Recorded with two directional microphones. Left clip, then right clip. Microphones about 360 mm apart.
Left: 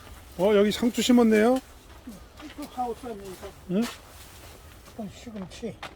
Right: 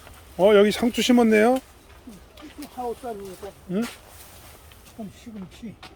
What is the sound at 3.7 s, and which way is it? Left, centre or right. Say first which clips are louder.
Speech: even; centre.